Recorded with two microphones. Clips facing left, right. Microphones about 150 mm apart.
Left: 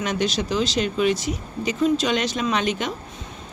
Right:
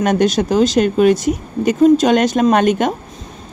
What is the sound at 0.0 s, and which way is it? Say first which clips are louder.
Speech: right 9 dB; 50° right (ahead or behind).